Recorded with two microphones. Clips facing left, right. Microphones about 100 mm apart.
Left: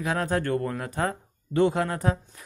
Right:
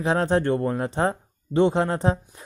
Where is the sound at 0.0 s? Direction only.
30° right (ahead or behind).